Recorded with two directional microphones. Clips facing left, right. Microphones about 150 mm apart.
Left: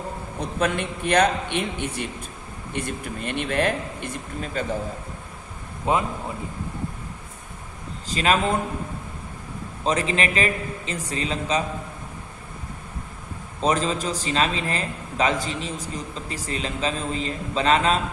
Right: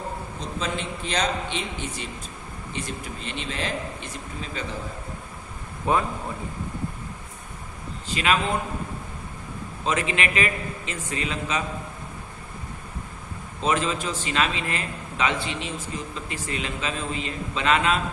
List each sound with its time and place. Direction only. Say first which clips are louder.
0.3 s speech: left 7 dB; 60° left (ahead or behind)
5.8 s a man's voice: left 1 dB; 20° left (ahead or behind)
8.0 s a man's voice: left 2 dB; 40° left (ahead or behind)
9.8 s a man's voice: left 3 dB; 35° left (ahead or behind)
13.6 s a man's voice: left 2 dB; 35° left (ahead or behind)